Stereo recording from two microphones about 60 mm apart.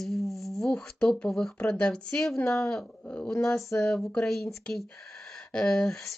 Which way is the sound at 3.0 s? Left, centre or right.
Left.